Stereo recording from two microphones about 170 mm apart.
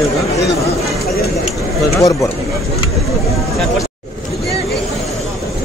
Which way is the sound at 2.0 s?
20° left (ahead or behind).